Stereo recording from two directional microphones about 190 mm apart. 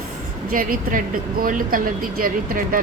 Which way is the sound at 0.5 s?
45° right (ahead or behind).